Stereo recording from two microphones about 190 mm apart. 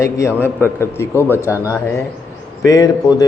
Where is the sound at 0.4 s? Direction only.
10° left (ahead or behind).